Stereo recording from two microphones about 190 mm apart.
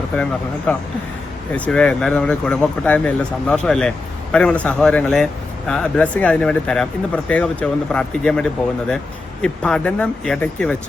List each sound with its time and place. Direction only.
0.7 s speech: 5° left (ahead or behind)